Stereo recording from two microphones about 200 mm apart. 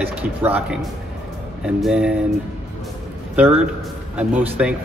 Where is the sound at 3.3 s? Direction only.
10° right (ahead or behind).